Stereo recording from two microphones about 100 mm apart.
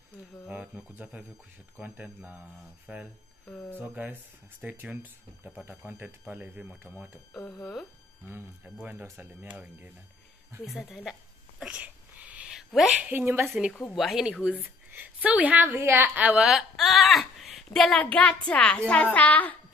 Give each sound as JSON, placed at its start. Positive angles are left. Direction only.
{"t": 0.5, "sound": "a woman's voice", "side_deg": -15}
{"t": 3.4, "sound": "speech", "side_deg": 25}
{"t": 3.8, "sound": "a woman's voice", "side_deg": -15}
{"t": 8.6, "sound": "a woman's voice", "side_deg": -15}
{"t": 10.6, "sound": "speech", "side_deg": -5}
{"t": 11.6, "sound": "a sound", "side_deg": -15}
{"t": 13.1, "sound": "speech", "side_deg": -20}
{"t": 13.6, "sound": "speech", "side_deg": -5}
{"t": 14.6, "sound": "a woman's voice", "side_deg": -20}
{"t": 17.9, "sound": "a child's voice", "side_deg": 15}